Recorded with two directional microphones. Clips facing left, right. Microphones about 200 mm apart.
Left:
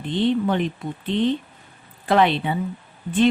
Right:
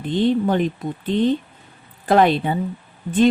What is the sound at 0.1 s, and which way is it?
A woman's voice, 45° right (ahead or behind).